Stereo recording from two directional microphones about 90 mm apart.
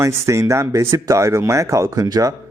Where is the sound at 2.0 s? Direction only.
50° right (ahead or behind).